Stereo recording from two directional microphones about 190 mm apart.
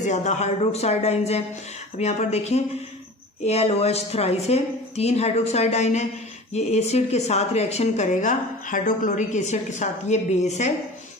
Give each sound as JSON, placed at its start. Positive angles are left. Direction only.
{"t": 0.0, "sound": "a woman's voice", "side_deg": 40}